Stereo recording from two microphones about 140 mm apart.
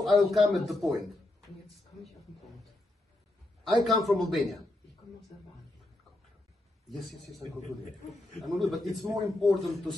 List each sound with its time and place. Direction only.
0.0 s a man's voice: centre (ahead or behind)
3.6 s a man's voice: centre (ahead or behind)
7.1 s a man's voice: centre (ahead or behind)
7.6 s a man's voice: 55° left (ahead or behind)
8.5 s a man's voice: centre (ahead or behind)